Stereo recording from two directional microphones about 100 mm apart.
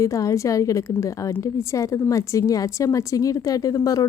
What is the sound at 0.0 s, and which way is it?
Speech, 35° left (ahead or behind).